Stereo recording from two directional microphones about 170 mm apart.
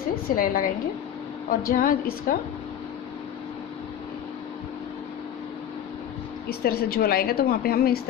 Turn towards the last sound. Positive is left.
turn(degrees=65)  # may be behind; listen again after turning